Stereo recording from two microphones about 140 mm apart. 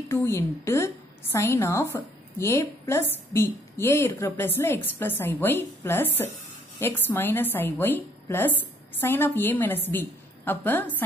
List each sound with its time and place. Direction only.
0.1 s a woman's voice: 20° left (ahead or behind)